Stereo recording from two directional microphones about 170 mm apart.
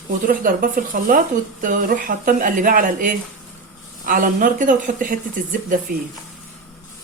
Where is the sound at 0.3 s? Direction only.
55° right (ahead or behind).